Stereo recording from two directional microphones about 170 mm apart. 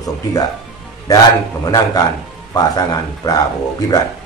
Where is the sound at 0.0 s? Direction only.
20° left (ahead or behind).